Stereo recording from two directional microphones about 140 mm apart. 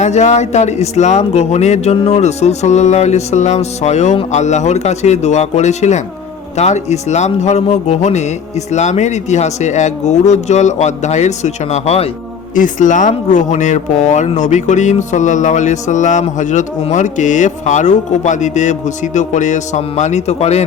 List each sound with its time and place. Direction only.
0.0 s speech: 55° left (ahead or behind)
12.5 s speech: 65° left (ahead or behind); by 20.7 s 50° left (ahead or behind)